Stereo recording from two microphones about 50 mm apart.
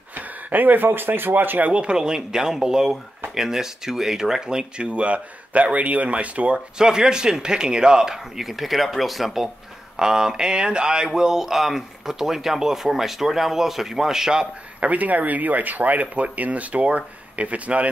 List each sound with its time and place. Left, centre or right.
0.1 s speech: right
1.7 s speech: right
6.8 s speech: centre
14.9 s speech: right